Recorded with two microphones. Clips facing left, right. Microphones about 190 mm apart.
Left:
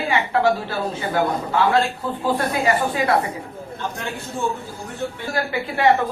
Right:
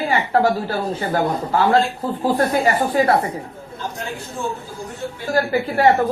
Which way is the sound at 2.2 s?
40° right (ahead or behind).